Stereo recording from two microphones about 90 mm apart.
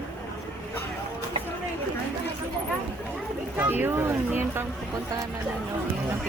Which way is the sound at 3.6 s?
20° right (ahead or behind).